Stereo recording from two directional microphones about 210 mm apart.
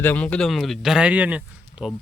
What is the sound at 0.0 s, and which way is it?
Speech, 5° left (ahead or behind).